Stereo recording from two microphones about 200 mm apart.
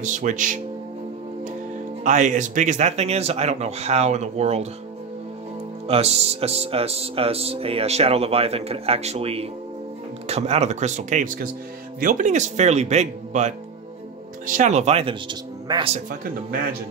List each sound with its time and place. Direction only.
0.0 s speech: 40° right (ahead or behind)
2.0 s speech: 40° right (ahead or behind)
5.9 s speech: 30° right (ahead or behind)